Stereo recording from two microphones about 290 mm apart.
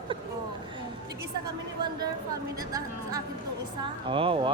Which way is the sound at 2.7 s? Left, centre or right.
Centre.